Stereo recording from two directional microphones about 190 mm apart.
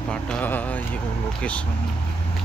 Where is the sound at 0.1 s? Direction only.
5° left (ahead or behind).